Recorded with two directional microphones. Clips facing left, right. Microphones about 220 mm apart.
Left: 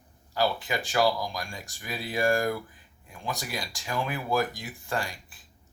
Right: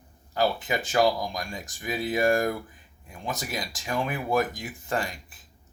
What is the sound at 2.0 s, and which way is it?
Speech, 20° right (ahead or behind).